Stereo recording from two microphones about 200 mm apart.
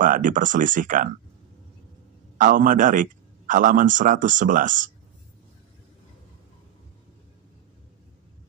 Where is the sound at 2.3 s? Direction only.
40° right (ahead or behind).